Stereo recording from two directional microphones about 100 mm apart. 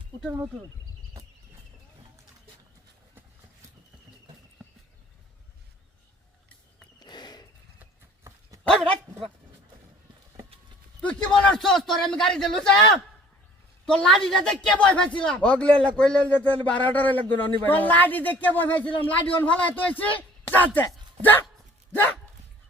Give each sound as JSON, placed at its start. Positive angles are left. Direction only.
{"t": 7.0, "sound": "a sound", "side_deg": 45}
{"t": 8.2, "sound": "dog", "side_deg": -35}
{"t": 8.6, "sound": "dog", "side_deg": 10}
{"t": 11.0, "sound": "a man's voice", "side_deg": 10}